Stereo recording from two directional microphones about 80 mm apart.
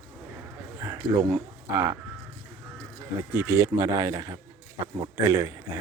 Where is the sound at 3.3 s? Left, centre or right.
Right.